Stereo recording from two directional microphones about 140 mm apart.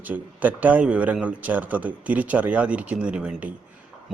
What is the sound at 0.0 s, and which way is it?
A man's voice, 10° right (ahead or behind).